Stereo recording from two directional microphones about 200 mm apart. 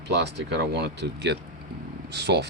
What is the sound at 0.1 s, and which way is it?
Speech, 55° right (ahead or behind).